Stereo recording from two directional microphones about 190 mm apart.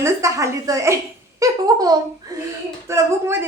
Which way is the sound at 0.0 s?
15° right (ahead or behind).